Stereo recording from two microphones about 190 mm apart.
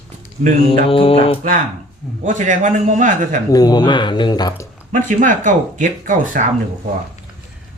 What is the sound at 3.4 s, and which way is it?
Speech, 20° left (ahead or behind).